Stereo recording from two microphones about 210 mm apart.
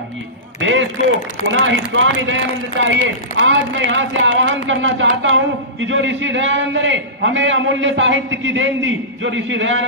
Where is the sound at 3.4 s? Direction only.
60° right (ahead or behind).